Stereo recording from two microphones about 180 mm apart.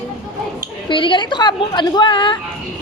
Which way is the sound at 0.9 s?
25° left (ahead or behind).